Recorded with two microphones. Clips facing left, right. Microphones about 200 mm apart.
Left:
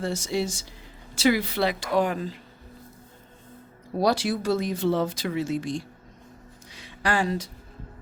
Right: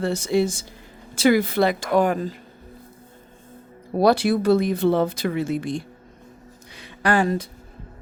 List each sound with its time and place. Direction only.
0.0 s speech: 60° right (ahead or behind); by 2.4 s 45° right (ahead or behind)
3.9 s speech: 60° right (ahead or behind)